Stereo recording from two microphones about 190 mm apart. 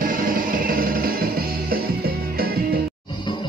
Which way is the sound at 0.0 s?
45° right (ahead or behind).